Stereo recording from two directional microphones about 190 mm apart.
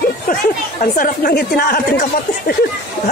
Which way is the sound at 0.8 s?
45° left (ahead or behind).